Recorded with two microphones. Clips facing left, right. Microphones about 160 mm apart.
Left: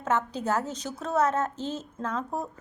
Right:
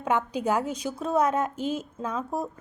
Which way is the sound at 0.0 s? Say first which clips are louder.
Right 2 dB; 15° right (ahead or behind).